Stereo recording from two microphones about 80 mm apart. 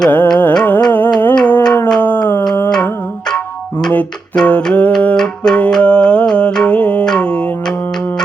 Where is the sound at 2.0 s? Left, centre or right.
Left.